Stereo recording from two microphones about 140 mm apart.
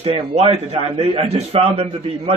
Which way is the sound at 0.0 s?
45° right (ahead or behind).